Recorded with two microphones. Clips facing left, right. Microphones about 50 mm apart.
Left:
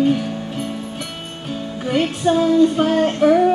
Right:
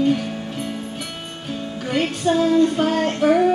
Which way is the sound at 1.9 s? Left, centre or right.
Centre.